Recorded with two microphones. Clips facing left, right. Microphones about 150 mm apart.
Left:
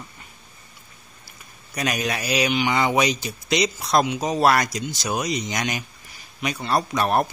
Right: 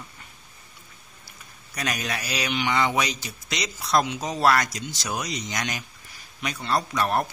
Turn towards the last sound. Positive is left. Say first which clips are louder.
# left 3 dB
turn(degrees=20)  # may be behind; listen again after turning